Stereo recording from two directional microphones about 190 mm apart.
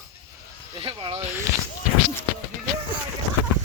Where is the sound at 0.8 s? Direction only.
30° right (ahead or behind).